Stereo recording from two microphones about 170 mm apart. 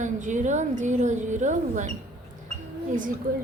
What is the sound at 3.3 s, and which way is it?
Speech, 55° right (ahead or behind).